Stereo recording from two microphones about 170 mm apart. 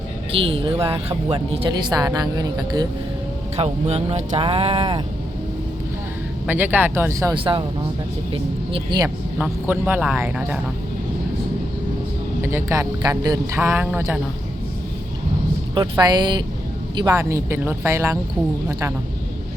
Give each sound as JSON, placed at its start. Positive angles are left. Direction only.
{"t": 0.3, "sound": "a woman's voice", "side_deg": -30}
{"t": 3.6, "sound": "speech", "side_deg": -40}
{"t": 6.5, "sound": "speech", "side_deg": -10}
{"t": 7.3, "sound": "a woman's voice", "side_deg": -30}
{"t": 9.4, "sound": "speech", "side_deg": -10}
{"t": 12.4, "sound": "speech", "side_deg": -15}
{"t": 15.7, "sound": "a woman's voice", "side_deg": -25}